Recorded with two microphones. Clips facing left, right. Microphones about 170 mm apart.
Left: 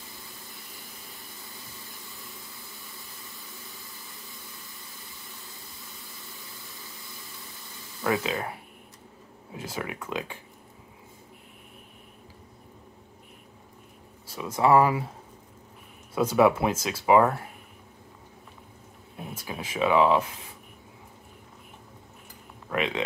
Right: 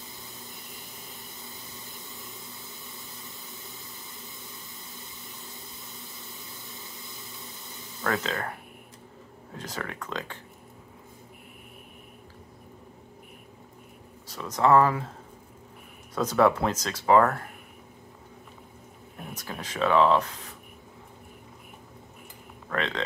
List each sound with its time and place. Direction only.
8.1 s speech: 20° left (ahead or behind)
9.5 s speech: 10° left (ahead or behind)
14.2 s speech: 10° left (ahead or behind)
16.2 s speech: 10° left (ahead or behind)
19.1 s speech: 10° left (ahead or behind)
22.7 s speech: 10° left (ahead or behind)